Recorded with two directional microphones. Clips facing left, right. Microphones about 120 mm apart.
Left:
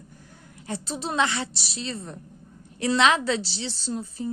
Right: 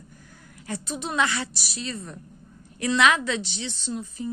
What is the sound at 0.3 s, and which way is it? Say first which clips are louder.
A woman's voice: left 1 dB; 25° left (ahead or behind).